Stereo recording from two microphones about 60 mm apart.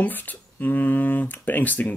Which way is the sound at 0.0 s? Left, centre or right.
Left.